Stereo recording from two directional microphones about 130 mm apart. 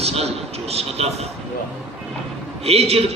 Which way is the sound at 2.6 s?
50° right (ahead or behind).